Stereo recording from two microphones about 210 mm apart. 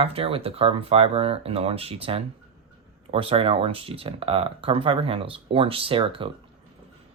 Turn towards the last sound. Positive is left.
turn(degrees=-25)  # may be behind; listen again after turning